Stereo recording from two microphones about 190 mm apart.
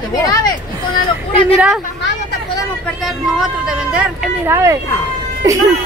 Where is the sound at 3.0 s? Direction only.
5° right (ahead or behind).